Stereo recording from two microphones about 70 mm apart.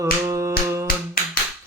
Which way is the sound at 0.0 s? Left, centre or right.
Right.